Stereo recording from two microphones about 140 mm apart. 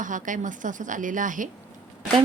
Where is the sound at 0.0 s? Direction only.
65° right (ahead or behind).